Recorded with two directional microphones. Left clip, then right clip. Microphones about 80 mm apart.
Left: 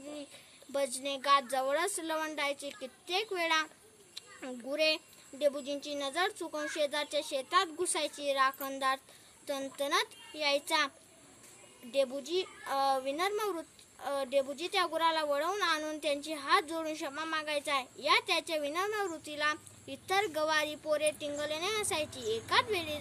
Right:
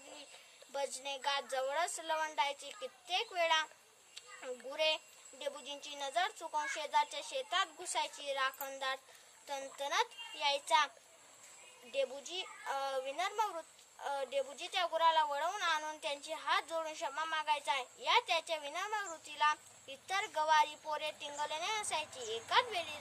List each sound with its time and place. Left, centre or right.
0.7 s a woman's voice: right
4.7 s a woman's voice: right
11.9 s a woman's voice: right